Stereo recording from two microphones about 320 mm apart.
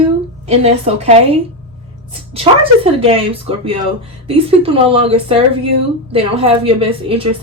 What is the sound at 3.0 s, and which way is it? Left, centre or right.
A woman's voice, centre.